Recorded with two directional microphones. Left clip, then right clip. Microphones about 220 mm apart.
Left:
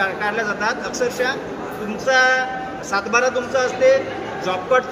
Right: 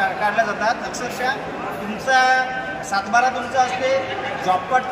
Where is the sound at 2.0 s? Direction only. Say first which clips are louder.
Even; centre (ahead or behind).